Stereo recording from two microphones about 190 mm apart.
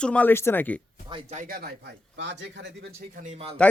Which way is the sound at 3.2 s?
35° right (ahead or behind).